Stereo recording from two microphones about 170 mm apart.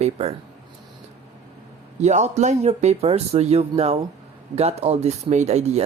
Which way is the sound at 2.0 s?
40° right (ahead or behind).